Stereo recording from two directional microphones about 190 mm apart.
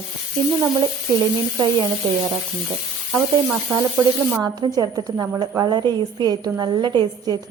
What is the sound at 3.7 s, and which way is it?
A woman's voice, 15° right (ahead or behind).